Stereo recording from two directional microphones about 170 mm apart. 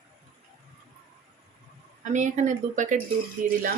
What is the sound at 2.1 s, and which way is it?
Speech, 45° right (ahead or behind).